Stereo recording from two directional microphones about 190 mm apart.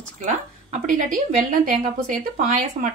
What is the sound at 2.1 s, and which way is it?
Speech, 45° right (ahead or behind).